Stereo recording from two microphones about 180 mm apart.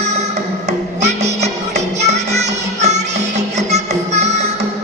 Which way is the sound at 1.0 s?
40° right (ahead or behind).